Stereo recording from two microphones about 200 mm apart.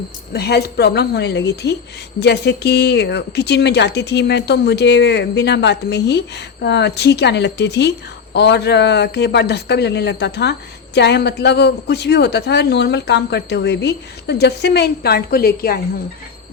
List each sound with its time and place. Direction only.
0.3 s a woman's voice: 55° left (ahead or behind)